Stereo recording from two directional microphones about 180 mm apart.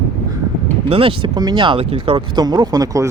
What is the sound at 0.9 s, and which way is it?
Speech, 30° right (ahead or behind).